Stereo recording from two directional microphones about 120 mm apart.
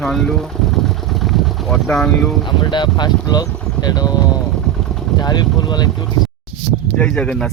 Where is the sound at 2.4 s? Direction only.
40° left (ahead or behind).